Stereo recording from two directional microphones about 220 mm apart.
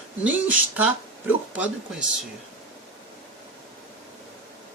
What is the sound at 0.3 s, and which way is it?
Speech, 5° right (ahead or behind).